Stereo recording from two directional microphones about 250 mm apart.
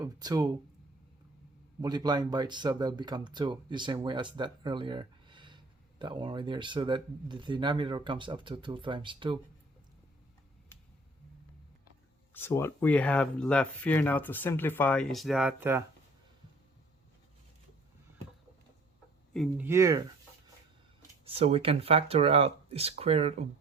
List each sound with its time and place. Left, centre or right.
0.0 s speech: centre
1.8 s speech: centre
12.3 s speech: centre
19.3 s speech: centre
19.6 s speech: centre
21.2 s speech: right